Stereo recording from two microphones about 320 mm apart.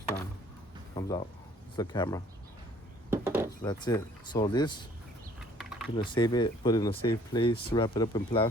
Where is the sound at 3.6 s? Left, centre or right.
Centre.